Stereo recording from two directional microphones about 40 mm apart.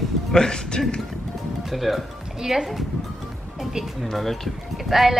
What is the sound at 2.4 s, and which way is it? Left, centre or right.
Speech, centre.